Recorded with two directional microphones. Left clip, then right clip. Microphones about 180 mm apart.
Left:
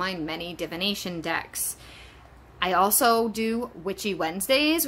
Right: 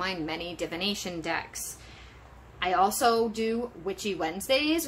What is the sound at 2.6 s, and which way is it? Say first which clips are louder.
Speech: left 2 dB; 35° left (ahead or behind).